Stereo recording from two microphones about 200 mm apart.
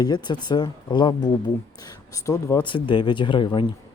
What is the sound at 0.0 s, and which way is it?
Speech, 20° left (ahead or behind).